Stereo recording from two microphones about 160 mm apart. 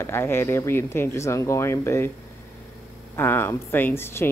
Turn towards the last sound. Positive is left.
turn(degrees=15)  # may be behind; listen again after turning